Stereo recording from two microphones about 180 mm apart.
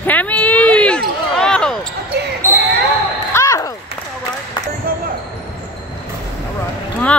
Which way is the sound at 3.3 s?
15° left (ahead or behind).